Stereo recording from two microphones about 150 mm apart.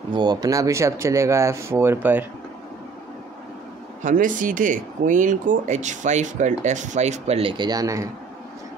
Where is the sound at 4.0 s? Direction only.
60° right (ahead or behind).